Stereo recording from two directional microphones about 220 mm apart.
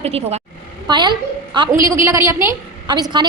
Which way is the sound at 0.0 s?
30° right (ahead or behind).